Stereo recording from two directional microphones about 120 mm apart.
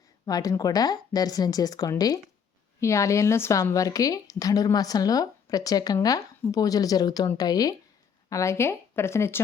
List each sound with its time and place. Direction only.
0.3 s a woman's voice: 30° left (ahead or behind)